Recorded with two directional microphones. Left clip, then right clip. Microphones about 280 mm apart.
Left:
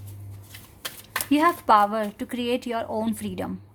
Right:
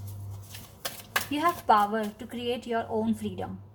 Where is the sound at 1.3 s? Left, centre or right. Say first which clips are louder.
Left 5 dB; left.